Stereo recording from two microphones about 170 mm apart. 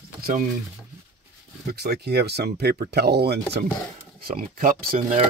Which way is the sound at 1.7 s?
70° right (ahead or behind).